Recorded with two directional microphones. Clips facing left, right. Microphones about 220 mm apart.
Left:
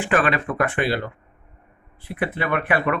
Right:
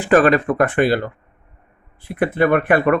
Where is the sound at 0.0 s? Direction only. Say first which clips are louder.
Right 7 dB; 40° right (ahead or behind).